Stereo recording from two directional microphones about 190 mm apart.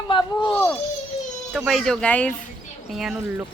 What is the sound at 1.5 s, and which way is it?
Speech, centre (ahead or behind).